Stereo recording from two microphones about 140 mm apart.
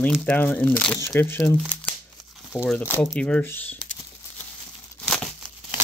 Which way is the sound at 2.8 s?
10° left (ahead or behind).